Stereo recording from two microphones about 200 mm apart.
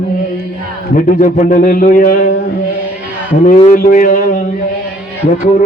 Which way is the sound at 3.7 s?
45° left (ahead or behind).